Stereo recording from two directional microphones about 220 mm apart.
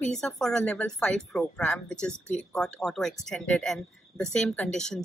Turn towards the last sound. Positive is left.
turn(degrees=5)  # may be behind; listen again after turning